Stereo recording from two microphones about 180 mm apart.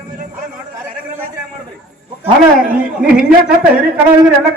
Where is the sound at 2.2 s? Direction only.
10° right (ahead or behind).